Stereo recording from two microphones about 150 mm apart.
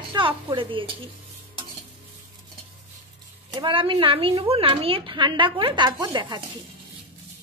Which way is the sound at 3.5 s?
35° right (ahead or behind).